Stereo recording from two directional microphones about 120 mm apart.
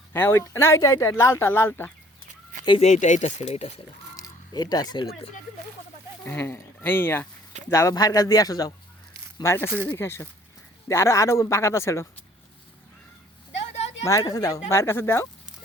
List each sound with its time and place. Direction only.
0.1 s speech: 20° left (ahead or behind)
2.8 s speech: 85° left; by 3.7 s 65° left (ahead or behind)
4.2 s speech: 35° left (ahead or behind)
6.2 s a man's voice: 20° left (ahead or behind)
9.4 s speech: 20° left (ahead or behind)
14.0 s speech: 30° left (ahead or behind)